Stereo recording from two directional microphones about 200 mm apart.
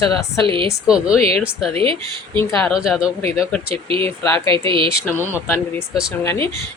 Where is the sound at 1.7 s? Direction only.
30° right (ahead or behind).